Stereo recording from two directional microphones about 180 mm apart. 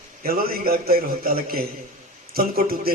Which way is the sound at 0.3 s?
55° right (ahead or behind).